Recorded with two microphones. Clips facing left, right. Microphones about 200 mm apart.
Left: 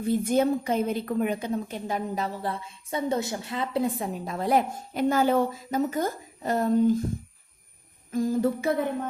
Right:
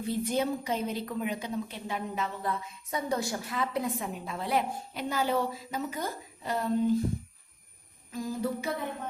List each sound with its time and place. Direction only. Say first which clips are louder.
0.0 s a woman's voice: left 6 dB; 50° left (ahead or behind)
8.1 s a woman's voice: left 8 dB; 50° left (ahead or behind)